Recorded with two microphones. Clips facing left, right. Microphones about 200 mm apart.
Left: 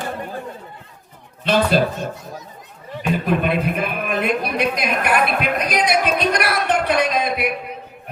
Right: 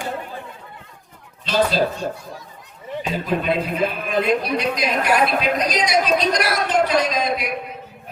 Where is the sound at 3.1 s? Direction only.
55° left (ahead or behind).